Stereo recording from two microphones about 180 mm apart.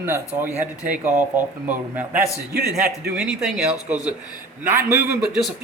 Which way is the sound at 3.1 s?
5° right (ahead or behind).